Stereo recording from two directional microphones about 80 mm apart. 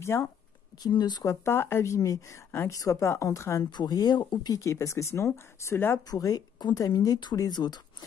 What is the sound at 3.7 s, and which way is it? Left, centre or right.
Speech, left.